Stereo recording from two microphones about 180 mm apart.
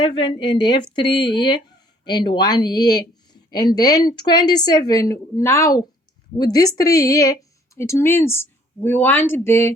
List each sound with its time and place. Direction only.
0.2 s speech: 25° left (ahead or behind)